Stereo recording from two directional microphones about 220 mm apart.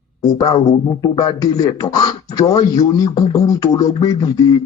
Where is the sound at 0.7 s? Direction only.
30° left (ahead or behind).